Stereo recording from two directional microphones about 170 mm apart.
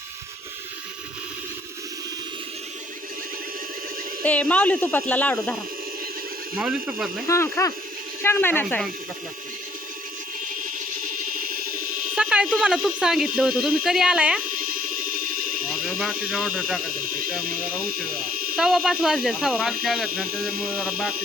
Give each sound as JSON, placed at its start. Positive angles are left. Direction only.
{"t": 4.2, "sound": "speech", "side_deg": 10}
{"t": 6.6, "sound": "speech", "side_deg": -5}
{"t": 7.3, "sound": "speech", "side_deg": 15}
{"t": 11.4, "sound": "a sound", "side_deg": -60}
{"t": 12.1, "sound": "speech", "side_deg": -5}
{"t": 14.5, "sound": "a sound", "side_deg": -55}
{"t": 16.3, "sound": "speech", "side_deg": -5}
{"t": 16.9, "sound": "speech", "side_deg": -55}
{"t": 18.5, "sound": "speech", "side_deg": -5}
{"t": 20.2, "sound": "speech", "side_deg": -60}